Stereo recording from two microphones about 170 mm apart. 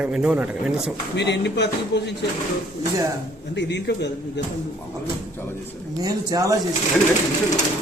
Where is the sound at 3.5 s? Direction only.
90° left.